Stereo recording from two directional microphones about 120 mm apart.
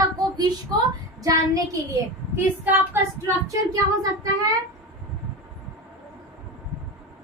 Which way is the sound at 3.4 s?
30° right (ahead or behind).